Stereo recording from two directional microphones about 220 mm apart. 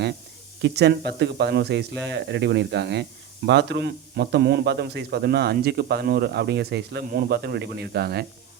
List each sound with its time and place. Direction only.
0.6 s speech: 50° right (ahead or behind)